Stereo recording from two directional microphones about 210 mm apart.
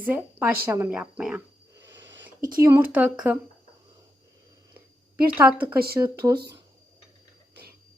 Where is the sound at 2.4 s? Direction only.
40° right (ahead or behind).